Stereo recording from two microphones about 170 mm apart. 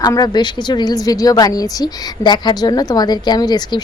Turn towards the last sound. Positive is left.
turn(degrees=25)  # may be behind; listen again after turning